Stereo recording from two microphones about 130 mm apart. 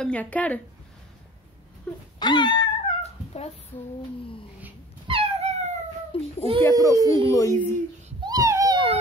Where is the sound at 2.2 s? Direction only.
35° left (ahead or behind).